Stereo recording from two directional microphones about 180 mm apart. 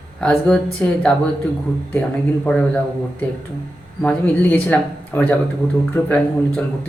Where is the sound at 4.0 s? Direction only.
10° left (ahead or behind).